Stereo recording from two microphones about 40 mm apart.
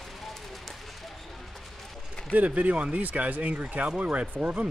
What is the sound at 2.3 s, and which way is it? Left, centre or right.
Speech, right.